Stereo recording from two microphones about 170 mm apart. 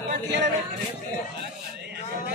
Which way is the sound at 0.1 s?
90° right.